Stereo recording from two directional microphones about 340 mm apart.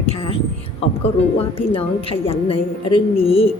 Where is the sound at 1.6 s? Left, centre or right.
Centre.